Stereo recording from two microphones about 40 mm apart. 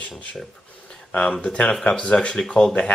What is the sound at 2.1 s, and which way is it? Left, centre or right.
Speech, left.